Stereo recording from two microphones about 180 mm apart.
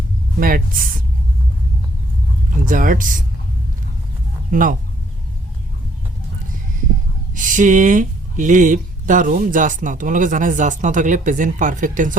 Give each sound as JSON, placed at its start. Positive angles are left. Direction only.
{"t": 0.3, "sound": "speech", "side_deg": -50}
{"t": 2.5, "sound": "speech", "side_deg": -45}
{"t": 4.5, "sound": "speech", "side_deg": -45}
{"t": 7.3, "sound": "speech", "side_deg": -45}